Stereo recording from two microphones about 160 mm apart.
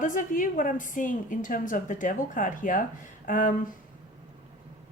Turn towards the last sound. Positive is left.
turn(degrees=55)  # may be behind; listen again after turning